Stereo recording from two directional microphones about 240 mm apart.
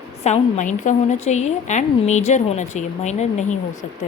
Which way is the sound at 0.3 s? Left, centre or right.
Left.